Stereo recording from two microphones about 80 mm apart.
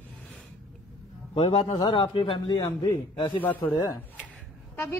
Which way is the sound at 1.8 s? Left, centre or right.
Left.